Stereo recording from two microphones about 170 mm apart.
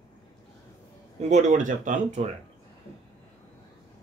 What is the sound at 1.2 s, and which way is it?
Speech, 45° right (ahead or behind).